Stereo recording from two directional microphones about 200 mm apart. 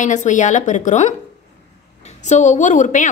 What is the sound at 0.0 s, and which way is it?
A woman's voice, 40° left (ahead or behind).